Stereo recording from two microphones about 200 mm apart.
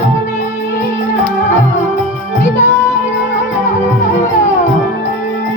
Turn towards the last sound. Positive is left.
turn(degrees=40)  # may be behind; listen again after turning